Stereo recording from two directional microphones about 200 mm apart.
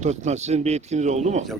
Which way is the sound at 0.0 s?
35° right (ahead or behind).